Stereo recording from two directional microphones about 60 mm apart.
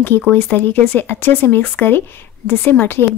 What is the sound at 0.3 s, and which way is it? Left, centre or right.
A woman's voice, left.